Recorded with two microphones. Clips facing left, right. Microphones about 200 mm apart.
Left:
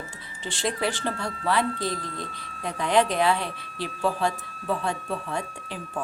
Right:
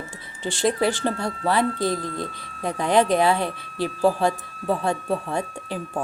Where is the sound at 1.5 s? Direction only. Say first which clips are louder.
Right 4 dB; 45° right (ahead or behind).